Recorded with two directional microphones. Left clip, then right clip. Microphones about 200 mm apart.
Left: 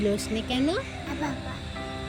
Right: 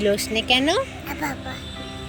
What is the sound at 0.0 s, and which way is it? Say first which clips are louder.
Speech: right 6 dB; centre (ahead or behind).